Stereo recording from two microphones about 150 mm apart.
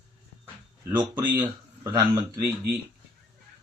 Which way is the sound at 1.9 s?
20° right (ahead or behind).